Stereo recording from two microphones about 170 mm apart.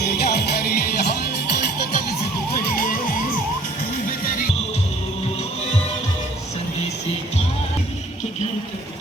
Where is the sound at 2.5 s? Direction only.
55° left (ahead or behind).